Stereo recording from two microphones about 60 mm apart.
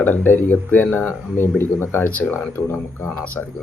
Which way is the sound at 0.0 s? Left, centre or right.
Left.